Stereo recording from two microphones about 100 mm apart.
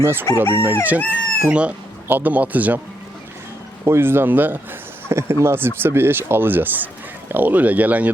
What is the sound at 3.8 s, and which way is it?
Speech, 25° right (ahead or behind).